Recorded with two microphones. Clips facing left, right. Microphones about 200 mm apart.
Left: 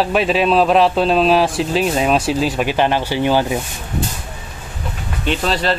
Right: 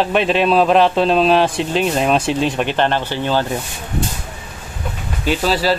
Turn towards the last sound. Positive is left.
turn(degrees=-5)  # may be behind; listen again after turning